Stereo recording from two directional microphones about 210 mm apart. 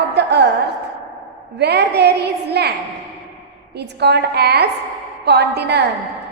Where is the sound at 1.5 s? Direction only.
50° right (ahead or behind).